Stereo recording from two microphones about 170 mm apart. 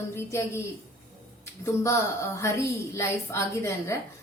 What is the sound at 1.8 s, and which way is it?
A woman's voice, 15° left (ahead or behind).